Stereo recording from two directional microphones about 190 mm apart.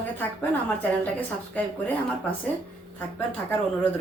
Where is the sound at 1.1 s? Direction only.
10° left (ahead or behind).